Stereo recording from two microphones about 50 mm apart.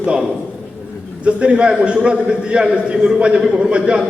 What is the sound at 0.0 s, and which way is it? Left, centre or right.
A man's voice, centre.